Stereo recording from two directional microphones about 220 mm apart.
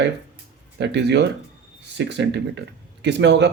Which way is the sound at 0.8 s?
50° right (ahead or behind).